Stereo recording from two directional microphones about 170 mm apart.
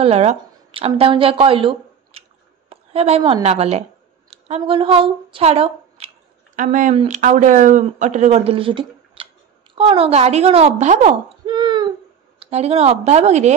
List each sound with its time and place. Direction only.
0.0 s a woman's voice: 40° right (ahead or behind)
11.4 s a sound: 25° right (ahead or behind)
12.4 s a woman's voice: 40° right (ahead or behind)